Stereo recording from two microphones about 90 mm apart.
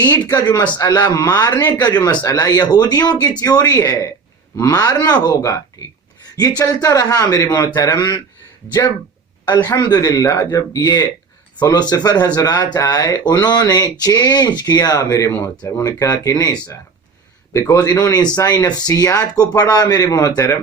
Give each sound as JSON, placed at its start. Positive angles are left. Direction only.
{"t": 0.0, "sound": "speech", "side_deg": 50}
{"t": 9.7, "sound": "speech", "side_deg": 45}